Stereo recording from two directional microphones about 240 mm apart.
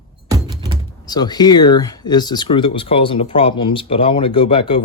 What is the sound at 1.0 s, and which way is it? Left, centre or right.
Speech, centre.